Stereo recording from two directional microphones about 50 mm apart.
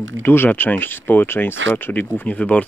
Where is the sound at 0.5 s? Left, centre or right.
Left.